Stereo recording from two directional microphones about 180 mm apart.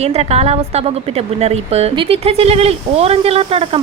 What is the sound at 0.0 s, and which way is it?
Speech, 35° right (ahead or behind).